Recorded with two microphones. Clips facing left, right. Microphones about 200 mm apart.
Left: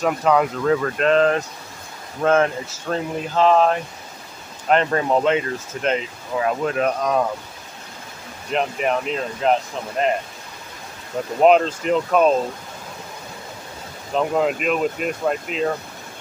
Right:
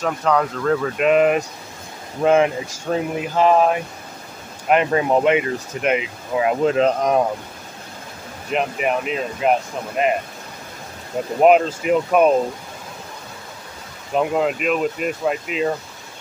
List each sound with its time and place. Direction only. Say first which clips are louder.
0.0 s speech: left 2 dB; 10° left (ahead or behind); by 7.2 s 20° right (ahead or behind)
8.5 s speech: even; 5° right (ahead or behind)
11.4 s speech: right 1 dB; 5° right (ahead or behind)
14.1 s speech: right 1 dB; 5° right (ahead or behind)